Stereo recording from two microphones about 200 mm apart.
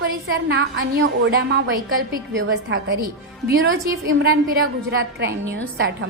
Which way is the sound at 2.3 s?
75° right (ahead or behind).